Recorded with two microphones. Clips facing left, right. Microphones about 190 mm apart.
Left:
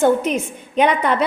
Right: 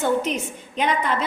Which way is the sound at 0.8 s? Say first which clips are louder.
Left 6 dB; 65° left (ahead or behind).